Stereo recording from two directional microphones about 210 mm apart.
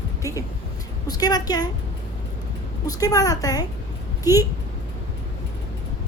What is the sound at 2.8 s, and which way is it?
A woman's voice, 15° left (ahead or behind).